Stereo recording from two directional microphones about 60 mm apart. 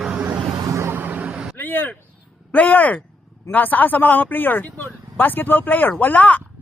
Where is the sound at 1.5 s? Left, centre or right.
Left.